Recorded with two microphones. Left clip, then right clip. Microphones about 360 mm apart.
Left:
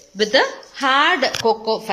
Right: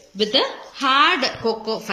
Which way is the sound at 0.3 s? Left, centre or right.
Left.